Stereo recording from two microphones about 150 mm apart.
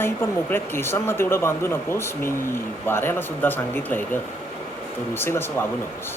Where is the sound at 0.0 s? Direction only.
15° left (ahead or behind).